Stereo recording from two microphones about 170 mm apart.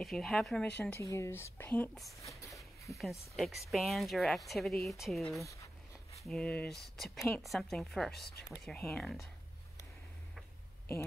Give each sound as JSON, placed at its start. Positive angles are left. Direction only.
{"t": 0.0, "sound": "speech", "side_deg": 0}
{"t": 3.3, "sound": "speech", "side_deg": 0}
{"t": 5.4, "sound": "speech", "side_deg": 20}
{"t": 6.2, "sound": "speech", "side_deg": 5}